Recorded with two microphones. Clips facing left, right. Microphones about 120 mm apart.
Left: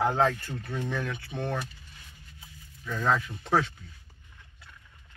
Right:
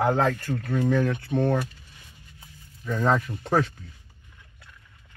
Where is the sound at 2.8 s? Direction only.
50° right (ahead or behind).